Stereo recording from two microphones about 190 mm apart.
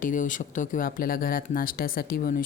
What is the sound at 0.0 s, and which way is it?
Speech, 45° left (ahead or behind).